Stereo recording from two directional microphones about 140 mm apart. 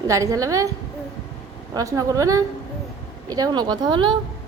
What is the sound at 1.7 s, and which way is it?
A woman's voice, 25° right (ahead or behind).